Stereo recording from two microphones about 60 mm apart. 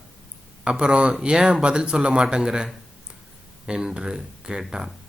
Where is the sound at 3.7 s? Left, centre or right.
Centre.